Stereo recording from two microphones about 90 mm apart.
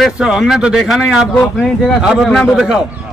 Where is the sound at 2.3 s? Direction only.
Centre (ahead or behind).